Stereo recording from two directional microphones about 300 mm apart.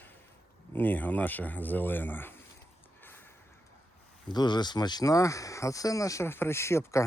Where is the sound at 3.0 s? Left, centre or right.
Centre.